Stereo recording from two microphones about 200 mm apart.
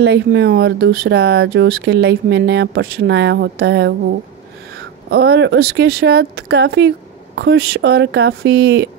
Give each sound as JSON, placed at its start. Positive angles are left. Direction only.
{"t": 0.0, "sound": "speech", "side_deg": -60}
{"t": 5.1, "sound": "speech", "side_deg": -55}